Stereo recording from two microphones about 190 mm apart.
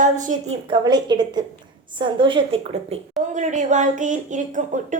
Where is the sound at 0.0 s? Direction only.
40° right (ahead or behind).